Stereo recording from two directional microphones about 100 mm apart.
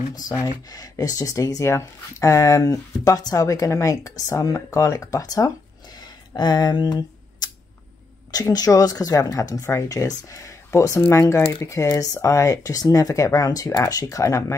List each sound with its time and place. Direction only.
0.5 s speech: 40° left (ahead or behind)
5.9 s a sound: 45° left (ahead or behind)
8.3 s speech: 40° left (ahead or behind)